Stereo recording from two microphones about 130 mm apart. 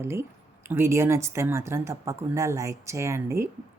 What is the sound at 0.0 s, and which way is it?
Speech, 20° right (ahead or behind).